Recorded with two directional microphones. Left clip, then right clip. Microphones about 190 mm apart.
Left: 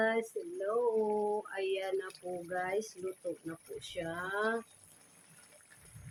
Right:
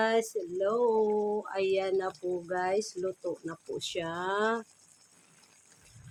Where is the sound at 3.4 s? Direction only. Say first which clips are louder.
Right 7 dB; 55° right (ahead or behind).